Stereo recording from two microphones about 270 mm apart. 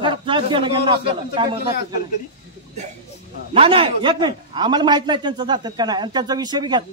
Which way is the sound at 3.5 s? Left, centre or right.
Right.